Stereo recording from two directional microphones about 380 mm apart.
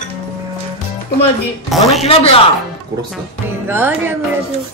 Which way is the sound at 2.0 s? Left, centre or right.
Centre.